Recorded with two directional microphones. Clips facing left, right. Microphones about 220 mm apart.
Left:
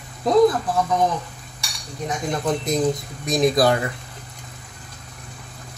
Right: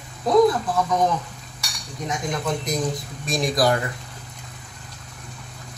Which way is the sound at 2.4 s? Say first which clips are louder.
Left 7 dB; 25° left (ahead or behind).